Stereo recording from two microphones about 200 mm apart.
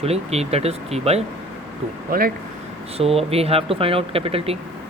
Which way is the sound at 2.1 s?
45° right (ahead or behind).